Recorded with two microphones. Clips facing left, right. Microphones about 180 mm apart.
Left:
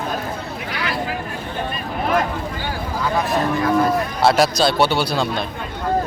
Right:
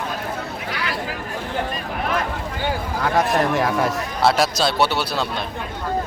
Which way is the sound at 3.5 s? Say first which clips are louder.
Left 3 dB; 80° right.